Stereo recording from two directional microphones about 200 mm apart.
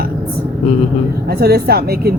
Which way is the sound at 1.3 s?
50° right (ahead or behind).